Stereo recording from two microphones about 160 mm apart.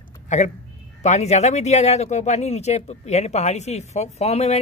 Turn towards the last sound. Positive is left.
turn(degrees=40)  # may be behind; listen again after turning